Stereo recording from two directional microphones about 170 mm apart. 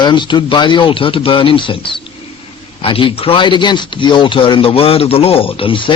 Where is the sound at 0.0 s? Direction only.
25° left (ahead or behind).